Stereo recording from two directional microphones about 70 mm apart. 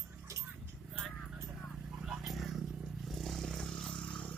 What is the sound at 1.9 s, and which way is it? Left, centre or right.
Vehicle, centre.